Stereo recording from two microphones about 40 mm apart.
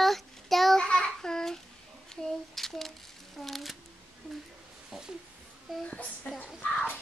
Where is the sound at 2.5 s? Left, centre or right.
Centre.